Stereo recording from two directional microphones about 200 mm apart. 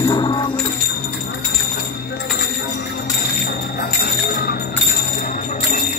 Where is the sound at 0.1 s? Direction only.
20° left (ahead or behind).